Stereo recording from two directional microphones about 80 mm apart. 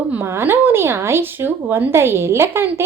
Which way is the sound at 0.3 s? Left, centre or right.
Right.